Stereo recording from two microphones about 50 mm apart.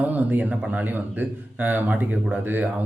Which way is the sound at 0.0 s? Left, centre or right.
Right.